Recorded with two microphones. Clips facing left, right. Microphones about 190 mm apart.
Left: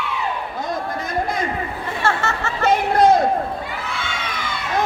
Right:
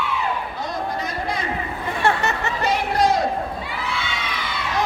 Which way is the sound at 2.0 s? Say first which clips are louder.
Right 1 dB; 20° right (ahead or behind).